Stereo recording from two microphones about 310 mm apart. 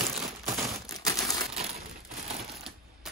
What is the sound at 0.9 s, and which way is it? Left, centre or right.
Crumpling, centre.